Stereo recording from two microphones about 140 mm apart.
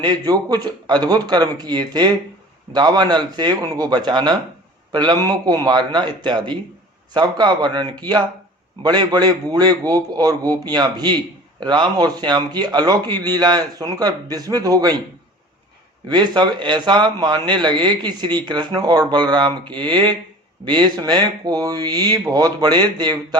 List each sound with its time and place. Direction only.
0.0 s a man's voice: 30° right (ahead or behind)
16.0 s a man's voice: 30° right (ahead or behind)